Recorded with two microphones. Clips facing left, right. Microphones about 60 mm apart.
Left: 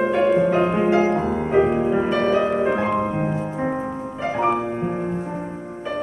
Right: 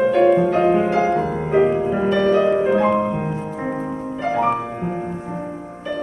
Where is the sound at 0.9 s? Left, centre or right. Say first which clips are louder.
Even; left.